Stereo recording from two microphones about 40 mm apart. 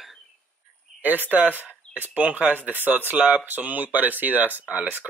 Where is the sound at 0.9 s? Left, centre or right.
Right.